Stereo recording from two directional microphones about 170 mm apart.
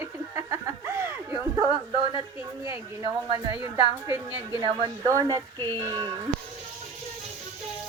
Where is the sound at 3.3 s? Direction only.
25° right (ahead or behind).